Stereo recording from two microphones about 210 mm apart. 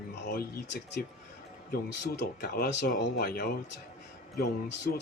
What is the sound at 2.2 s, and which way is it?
Speech, 45° left (ahead or behind).